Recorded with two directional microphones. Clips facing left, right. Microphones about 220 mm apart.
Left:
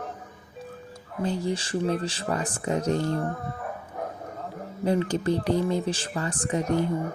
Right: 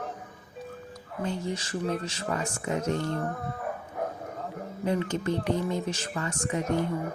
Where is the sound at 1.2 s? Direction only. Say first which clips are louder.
Left 4 dB; 35° left (ahead or behind).